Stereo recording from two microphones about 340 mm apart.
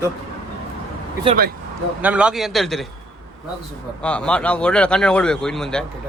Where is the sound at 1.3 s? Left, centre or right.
Right.